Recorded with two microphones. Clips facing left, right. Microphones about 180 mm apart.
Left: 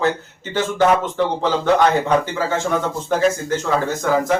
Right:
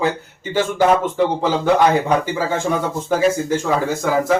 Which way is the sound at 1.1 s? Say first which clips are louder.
Right 1 dB; 10° right (ahead or behind).